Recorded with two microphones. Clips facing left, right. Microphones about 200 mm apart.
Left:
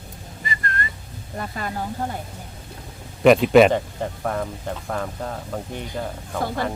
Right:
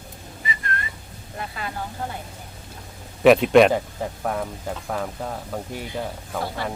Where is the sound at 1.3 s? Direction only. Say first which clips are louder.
Left 3 dB; 45° left (ahead or behind).